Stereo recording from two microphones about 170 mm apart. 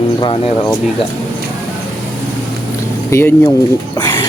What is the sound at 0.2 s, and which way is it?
Speech, 35° left (ahead or behind).